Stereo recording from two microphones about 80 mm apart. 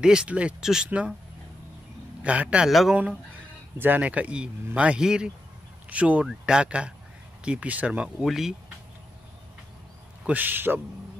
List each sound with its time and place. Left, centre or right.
0.0 s speech: centre
2.2 s speech: centre
2.7 s speech: centre
3.7 s speech: right
8.3 s speech: centre
10.2 s speech: right